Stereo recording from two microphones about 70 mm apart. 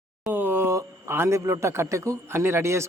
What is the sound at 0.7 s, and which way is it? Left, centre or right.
A man's voice, right.